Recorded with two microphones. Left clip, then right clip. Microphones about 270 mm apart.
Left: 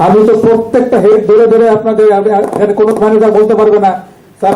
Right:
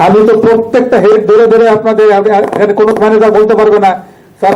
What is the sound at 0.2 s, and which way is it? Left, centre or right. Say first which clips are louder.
A man's voice: right 1 dB; right.